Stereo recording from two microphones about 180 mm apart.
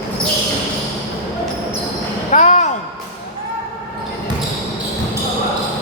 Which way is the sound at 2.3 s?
40° left (ahead or behind).